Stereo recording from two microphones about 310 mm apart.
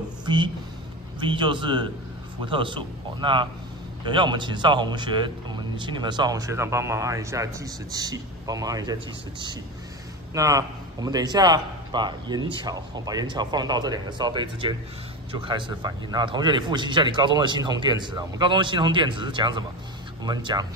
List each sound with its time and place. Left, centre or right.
0.2 s a sound: centre
1.2 s a man's voice: centre
10.3 s a man's voice: centre